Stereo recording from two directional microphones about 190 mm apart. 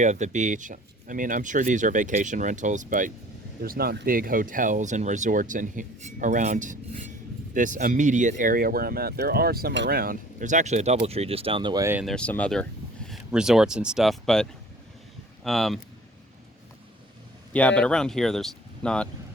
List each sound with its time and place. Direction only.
0.0 s speech: 40° right (ahead or behind)
3.6 s speech: 55° right (ahead or behind); by 12.0 s 15° right (ahead or behind)
12.0 s speech: 5° left (ahead or behind)
15.4 s speech: centre (ahead or behind)
17.5 s speech: 5° left (ahead or behind)